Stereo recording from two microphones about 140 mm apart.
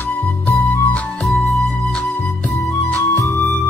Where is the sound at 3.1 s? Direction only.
20° left (ahead or behind).